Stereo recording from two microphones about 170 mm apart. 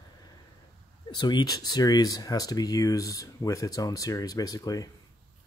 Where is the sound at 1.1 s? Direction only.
25° left (ahead or behind).